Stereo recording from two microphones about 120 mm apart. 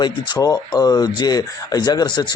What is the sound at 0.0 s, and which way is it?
Speech, 35° left (ahead or behind).